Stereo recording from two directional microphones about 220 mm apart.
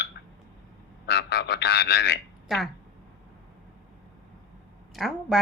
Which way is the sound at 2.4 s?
Centre (ahead or behind).